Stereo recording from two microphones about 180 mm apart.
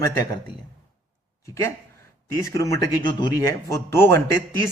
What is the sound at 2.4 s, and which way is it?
A man's voice, 15° left (ahead or behind).